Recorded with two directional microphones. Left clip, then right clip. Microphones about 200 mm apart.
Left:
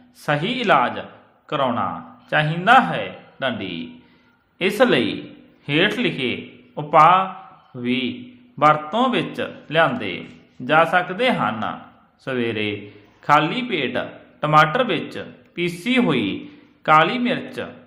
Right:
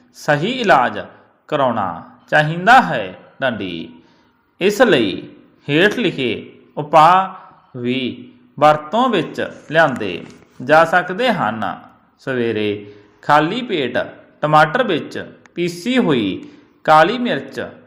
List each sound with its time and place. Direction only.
0.2 s a man's voice: 20° right (ahead or behind)